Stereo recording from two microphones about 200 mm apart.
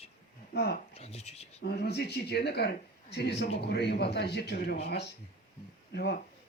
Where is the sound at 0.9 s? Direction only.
30° left (ahead or behind).